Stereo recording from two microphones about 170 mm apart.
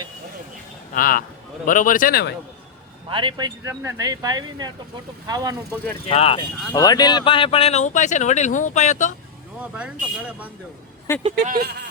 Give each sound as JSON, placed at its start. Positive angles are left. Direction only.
{"t": 0.9, "sound": "speech", "side_deg": 60}
{"t": 3.1, "sound": "speech", "side_deg": -30}
{"t": 6.1, "sound": "speech", "side_deg": 35}
{"t": 6.7, "sound": "speech", "side_deg": 25}
{"t": 9.7, "sound": "speech", "side_deg": -5}
{"t": 11.3, "sound": "speech", "side_deg": -60}